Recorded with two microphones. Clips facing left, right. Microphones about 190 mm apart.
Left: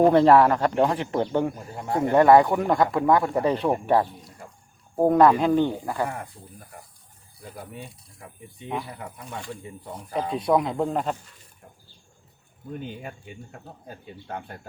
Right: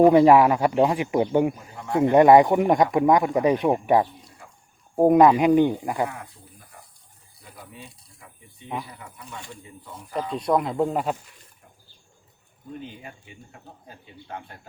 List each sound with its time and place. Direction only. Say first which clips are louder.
0.0 s speech: right 2 dB; 10° right (ahead or behind)
9.0 s speech: left 4 dB; 50° left (ahead or behind)
10.3 s speech: even; centre (ahead or behind)
13.0 s speech: left 5 dB; 45° left (ahead or behind)